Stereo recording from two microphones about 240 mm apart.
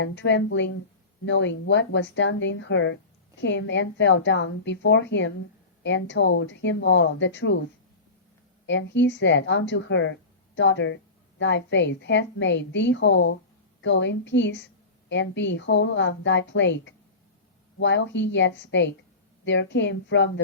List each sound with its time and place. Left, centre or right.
0.0 s a woman's voice: left
8.6 s a woman's voice: left